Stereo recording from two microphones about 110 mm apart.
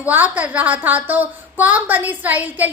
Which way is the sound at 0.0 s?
15° right (ahead or behind).